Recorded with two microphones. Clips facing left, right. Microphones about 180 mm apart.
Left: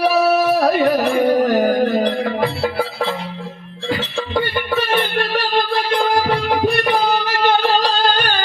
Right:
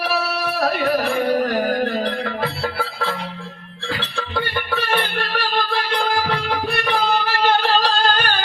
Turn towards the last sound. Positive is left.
turn(degrees=45)  # may be behind; listen again after turning